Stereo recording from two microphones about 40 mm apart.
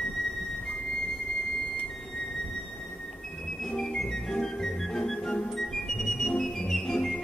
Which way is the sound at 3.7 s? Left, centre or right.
Centre.